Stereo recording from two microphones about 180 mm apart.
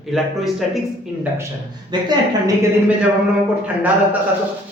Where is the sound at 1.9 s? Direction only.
25° right (ahead or behind).